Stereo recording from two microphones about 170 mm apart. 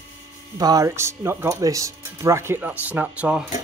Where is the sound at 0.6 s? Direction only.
20° right (ahead or behind).